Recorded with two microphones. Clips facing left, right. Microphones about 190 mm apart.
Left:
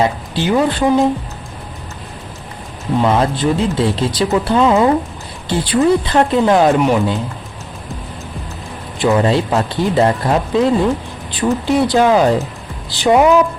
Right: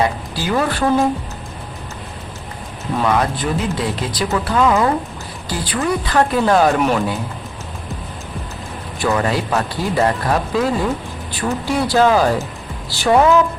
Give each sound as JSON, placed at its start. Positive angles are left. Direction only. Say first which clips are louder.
{"t": 0.0, "sound": "speech", "louder": "left 3 dB", "side_deg": 25}
{"t": 3.0, "sound": "speech", "louder": "left 3 dB", "side_deg": 25}
{"t": 9.0, "sound": "a woman's voice", "louder": "left 5 dB", "side_deg": 20}